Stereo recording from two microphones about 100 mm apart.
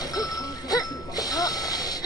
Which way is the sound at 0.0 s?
40° left (ahead or behind).